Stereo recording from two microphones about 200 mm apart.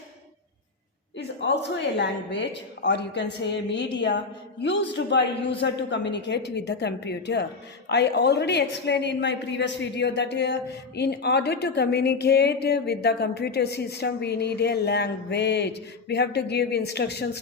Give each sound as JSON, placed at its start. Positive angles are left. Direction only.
{"t": 1.4, "sound": "a woman's voice", "side_deg": 60}